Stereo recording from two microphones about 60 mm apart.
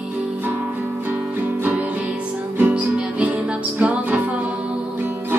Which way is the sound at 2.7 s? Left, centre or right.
Right.